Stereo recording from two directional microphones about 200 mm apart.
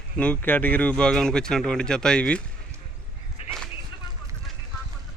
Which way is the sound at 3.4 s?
30° left (ahead or behind).